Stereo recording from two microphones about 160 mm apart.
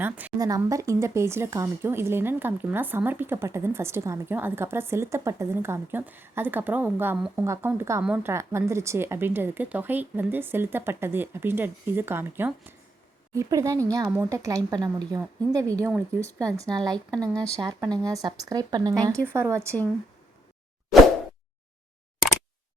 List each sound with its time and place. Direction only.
0.0 s speech: 10° right (ahead or behind)
0.3 s speech: 20° right (ahead or behind)